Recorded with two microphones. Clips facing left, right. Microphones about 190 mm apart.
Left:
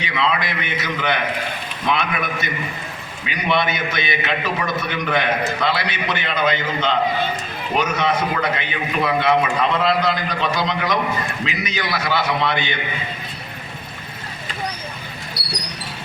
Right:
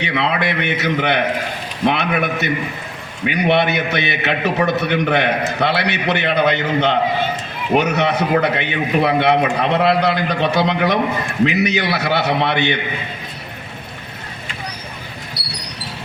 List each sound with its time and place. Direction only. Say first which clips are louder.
0.0 s a man's voice: right 3 dB; 60° right (ahead or behind)